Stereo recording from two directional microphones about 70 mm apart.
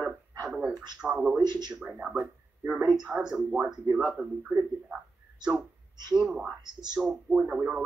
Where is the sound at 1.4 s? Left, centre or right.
Right.